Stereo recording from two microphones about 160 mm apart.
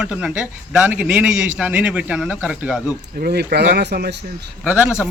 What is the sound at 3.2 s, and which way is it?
Speech, 85° right.